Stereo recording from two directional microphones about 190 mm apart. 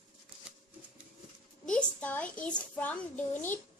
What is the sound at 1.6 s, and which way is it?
A child's voice, 5° left (ahead or behind).